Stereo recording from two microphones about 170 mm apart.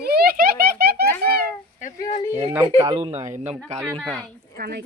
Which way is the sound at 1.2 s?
65° right (ahead or behind).